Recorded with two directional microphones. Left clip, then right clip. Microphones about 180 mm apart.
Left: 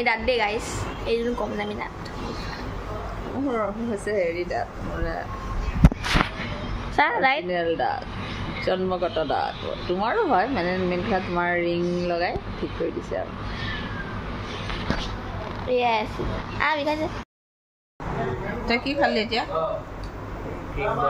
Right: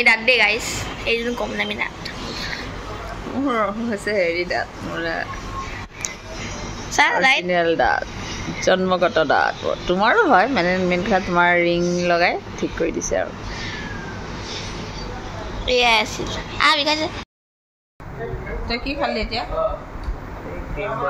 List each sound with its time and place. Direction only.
0.0 s a woman's voice: 20° left (ahead or behind)
3.4 s speech: 5° right (ahead or behind)
7.0 s a woman's voice: 20° left (ahead or behind)
7.4 s speech: 5° right (ahead or behind)
15.6 s a woman's voice: 10° left (ahead or behind)
18.7 s a woman's voice: 15° left (ahead or behind)